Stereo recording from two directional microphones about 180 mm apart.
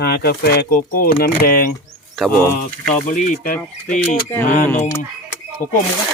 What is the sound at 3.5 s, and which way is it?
Speech, 10° left (ahead or behind).